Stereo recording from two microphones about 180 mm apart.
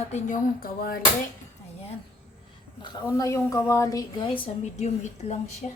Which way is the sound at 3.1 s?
15° left (ahead or behind).